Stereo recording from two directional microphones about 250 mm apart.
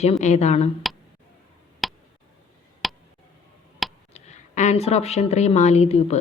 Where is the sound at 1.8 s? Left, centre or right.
Centre.